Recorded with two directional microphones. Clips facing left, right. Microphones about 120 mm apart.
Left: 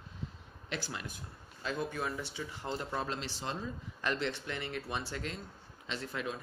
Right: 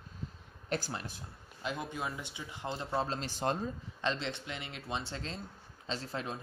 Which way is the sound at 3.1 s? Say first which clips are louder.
Right 5 dB; 45° right (ahead or behind).